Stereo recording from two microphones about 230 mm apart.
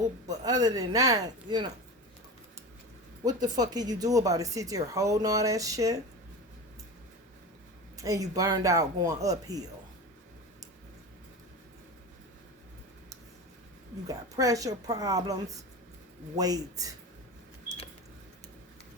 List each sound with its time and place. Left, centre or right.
0.3 s speech: centre
3.2 s speech: centre
7.9 s speech: centre
14.1 s speech: centre